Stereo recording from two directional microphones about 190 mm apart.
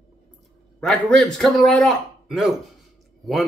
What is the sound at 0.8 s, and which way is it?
Speech, 5° left (ahead or behind).